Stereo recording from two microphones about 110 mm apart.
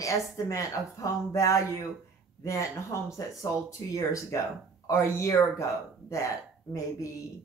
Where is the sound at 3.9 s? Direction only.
30° left (ahead or behind).